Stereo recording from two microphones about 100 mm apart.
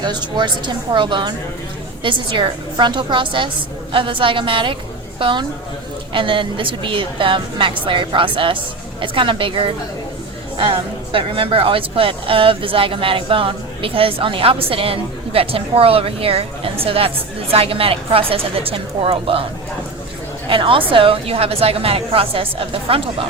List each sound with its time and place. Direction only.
0.0 s a woman's voice: 45° right (ahead or behind); by 19.5 s 65° right (ahead or behind)
20.5 s a woman's voice: 60° right (ahead or behind)